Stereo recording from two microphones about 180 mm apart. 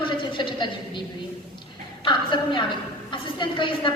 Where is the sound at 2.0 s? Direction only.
25° left (ahead or behind).